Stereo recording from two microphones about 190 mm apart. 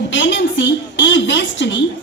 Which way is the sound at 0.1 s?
70° left (ahead or behind).